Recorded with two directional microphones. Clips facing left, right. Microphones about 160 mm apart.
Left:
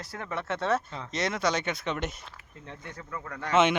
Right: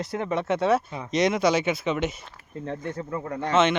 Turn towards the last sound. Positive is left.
turn(degrees=-25)  # may be behind; listen again after turning